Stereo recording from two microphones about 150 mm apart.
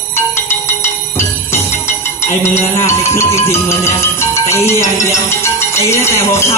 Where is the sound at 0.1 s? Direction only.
15° left (ahead or behind).